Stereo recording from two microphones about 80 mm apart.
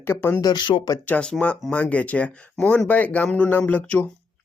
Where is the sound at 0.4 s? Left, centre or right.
Left.